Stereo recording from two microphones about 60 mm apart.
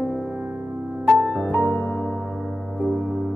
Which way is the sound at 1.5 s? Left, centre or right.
Right.